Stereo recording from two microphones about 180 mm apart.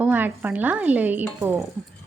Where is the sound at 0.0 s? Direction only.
10° right (ahead or behind).